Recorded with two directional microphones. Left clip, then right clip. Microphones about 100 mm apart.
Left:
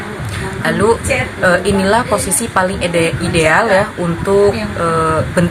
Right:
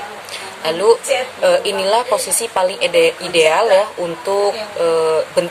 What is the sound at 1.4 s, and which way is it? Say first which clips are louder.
A woman's voice: left 2 dB; 35° right (ahead or behind).